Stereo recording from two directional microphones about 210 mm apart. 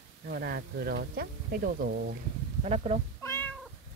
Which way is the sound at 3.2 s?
10° left (ahead or behind).